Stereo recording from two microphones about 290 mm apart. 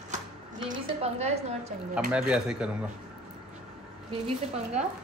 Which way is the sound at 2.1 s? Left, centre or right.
Centre.